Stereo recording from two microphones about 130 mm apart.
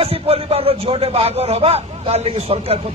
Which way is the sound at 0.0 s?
45° right (ahead or behind).